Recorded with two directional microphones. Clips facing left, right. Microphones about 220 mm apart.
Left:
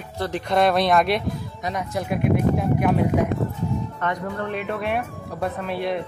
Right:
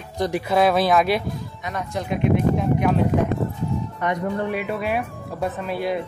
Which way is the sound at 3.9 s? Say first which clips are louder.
Right 3 dB; 15° right (ahead or behind).